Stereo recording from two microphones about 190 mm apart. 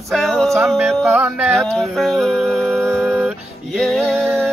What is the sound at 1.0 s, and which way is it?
Music, 15° right (ahead or behind).